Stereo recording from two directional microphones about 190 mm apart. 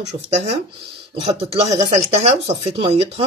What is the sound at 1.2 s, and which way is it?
Speech, 30° right (ahead or behind).